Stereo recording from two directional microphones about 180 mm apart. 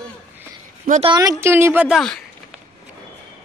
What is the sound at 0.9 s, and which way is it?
Speech, 30° right (ahead or behind).